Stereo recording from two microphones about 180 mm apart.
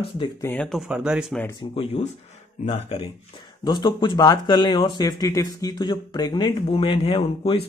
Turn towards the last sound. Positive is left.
turn(degrees=30)  # may be behind; listen again after turning